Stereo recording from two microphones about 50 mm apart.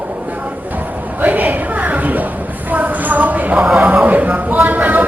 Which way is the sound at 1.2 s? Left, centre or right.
Right.